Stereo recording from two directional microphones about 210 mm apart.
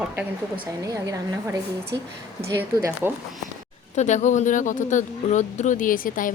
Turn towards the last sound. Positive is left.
turn(degrees=40)  # may be behind; listen again after turning